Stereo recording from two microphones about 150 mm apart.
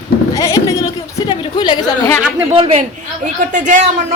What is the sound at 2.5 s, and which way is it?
Speech, 40° right (ahead or behind).